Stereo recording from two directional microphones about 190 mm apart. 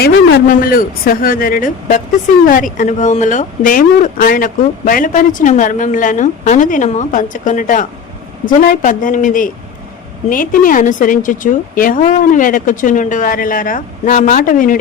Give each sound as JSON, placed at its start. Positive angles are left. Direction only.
{"t": 0.0, "sound": "speech", "side_deg": 55}